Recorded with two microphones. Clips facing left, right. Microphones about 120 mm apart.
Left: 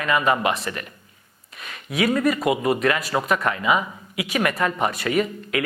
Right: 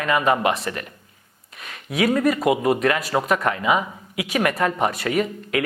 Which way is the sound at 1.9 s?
45° right (ahead or behind).